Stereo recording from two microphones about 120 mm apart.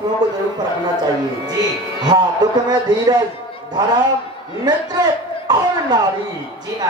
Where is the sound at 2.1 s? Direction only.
35° right (ahead or behind).